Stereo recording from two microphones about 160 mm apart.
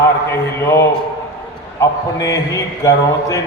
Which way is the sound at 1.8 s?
20° left (ahead or behind).